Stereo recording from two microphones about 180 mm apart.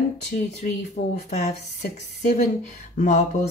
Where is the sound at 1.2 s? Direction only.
40° left (ahead or behind).